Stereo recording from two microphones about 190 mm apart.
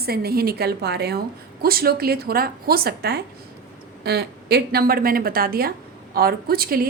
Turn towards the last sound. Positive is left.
turn(degrees=-50)  # may be behind; listen again after turning